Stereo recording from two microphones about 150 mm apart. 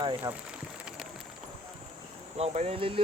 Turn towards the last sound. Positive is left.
turn(degrees=-35)  # may be behind; listen again after turning